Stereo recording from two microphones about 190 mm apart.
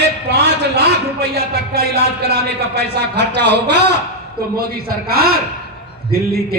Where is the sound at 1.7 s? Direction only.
55° right (ahead or behind).